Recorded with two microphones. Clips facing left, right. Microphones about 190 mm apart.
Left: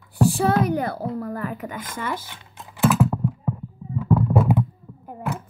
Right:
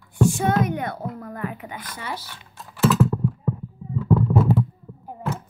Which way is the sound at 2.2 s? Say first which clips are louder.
Even; 20° left (ahead or behind).